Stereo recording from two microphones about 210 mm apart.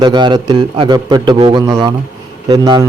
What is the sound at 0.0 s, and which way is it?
A man's voice, 20° right (ahead or behind).